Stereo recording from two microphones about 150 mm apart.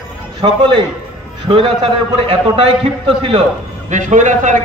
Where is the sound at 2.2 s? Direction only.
40° right (ahead or behind).